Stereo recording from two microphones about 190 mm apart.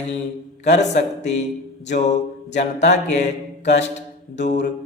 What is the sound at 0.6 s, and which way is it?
Speech, 40° left (ahead or behind).